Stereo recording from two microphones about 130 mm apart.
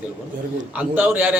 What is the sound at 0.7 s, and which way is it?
Speech, 15° right (ahead or behind).